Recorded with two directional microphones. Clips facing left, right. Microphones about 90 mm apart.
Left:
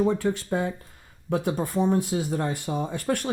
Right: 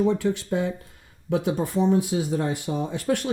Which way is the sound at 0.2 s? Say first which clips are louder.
Right 1 dB; 45° left (ahead or behind).